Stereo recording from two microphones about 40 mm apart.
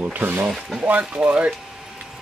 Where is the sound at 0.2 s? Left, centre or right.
Right.